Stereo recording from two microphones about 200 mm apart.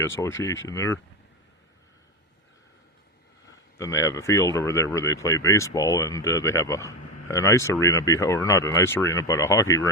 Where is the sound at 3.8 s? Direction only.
15° left (ahead or behind).